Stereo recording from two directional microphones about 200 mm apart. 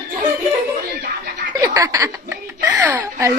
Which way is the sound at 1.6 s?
15° right (ahead or behind).